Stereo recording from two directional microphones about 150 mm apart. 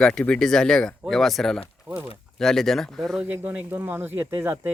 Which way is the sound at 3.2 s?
10° right (ahead or behind).